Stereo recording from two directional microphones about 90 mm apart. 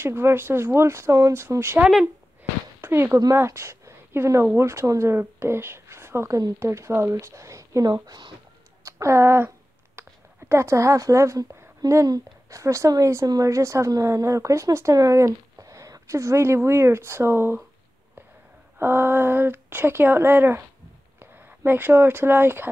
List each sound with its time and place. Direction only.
0.0 s speech: 30° right (ahead or behind)
2.8 s speech: 25° right (ahead or behind); by 8.3 s 45° right (ahead or behind)
8.9 s a sound: 30° right (ahead or behind)
10.5 s speech: 30° right (ahead or behind)
18.8 s speech: 25° right (ahead or behind)